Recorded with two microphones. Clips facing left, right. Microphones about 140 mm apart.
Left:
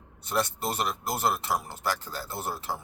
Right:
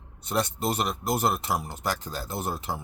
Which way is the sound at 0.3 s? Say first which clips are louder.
Right 2 dB; 20° right (ahead or behind).